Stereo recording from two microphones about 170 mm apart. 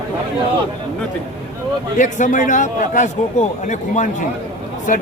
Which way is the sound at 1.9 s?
45° left (ahead or behind).